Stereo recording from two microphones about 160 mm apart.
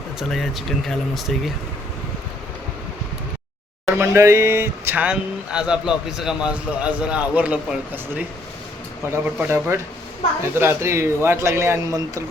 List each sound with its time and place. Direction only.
0.2 s speech: centre (ahead or behind)
3.9 s speech: 15° right (ahead or behind)